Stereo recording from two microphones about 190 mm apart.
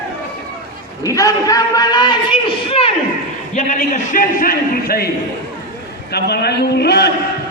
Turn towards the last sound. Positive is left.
turn(degrees=60)  # may be behind; listen again after turning